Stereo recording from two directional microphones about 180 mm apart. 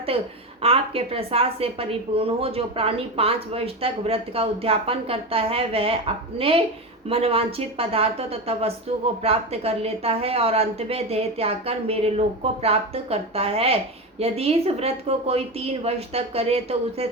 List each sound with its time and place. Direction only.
0.6 s a woman's voice: 30° right (ahead or behind)
7.1 s a woman's voice: 35° right (ahead or behind)